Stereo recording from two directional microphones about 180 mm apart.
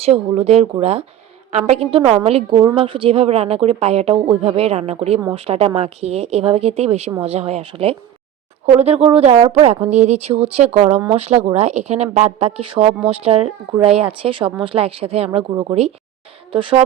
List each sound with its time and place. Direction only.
0.0 s a woman's voice: 35° right (ahead or behind)